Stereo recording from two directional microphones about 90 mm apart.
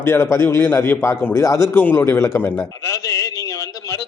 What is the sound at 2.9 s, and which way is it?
Speech, 40° left (ahead or behind).